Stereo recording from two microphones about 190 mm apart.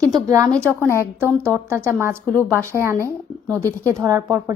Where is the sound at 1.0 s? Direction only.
10° right (ahead or behind).